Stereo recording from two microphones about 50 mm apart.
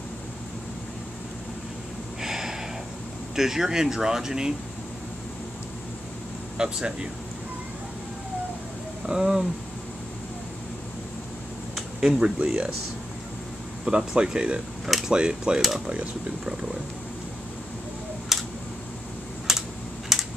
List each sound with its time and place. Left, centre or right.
2.2 s snort: centre
3.3 s speech: centre
6.6 s speech: centre
9.0 s speech: centre
12.0 s speech: centre
13.8 s speech: centre
18.3 s tick: centre
20.1 s typing: centre